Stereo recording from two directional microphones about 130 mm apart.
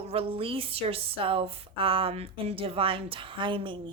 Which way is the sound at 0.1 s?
45° right (ahead or behind).